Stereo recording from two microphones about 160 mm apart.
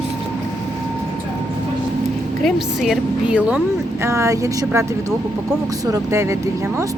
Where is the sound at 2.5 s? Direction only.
Centre (ahead or behind).